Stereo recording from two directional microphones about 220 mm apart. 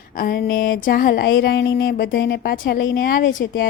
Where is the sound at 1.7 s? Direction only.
50° left (ahead or behind).